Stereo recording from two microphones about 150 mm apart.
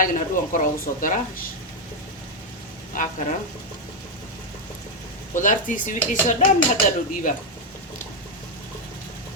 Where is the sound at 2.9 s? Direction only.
60° left (ahead or behind).